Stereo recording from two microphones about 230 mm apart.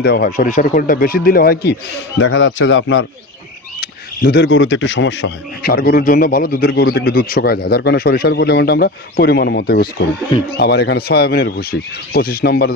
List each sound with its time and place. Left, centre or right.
0.0 s speech: left
3.8 s speech: left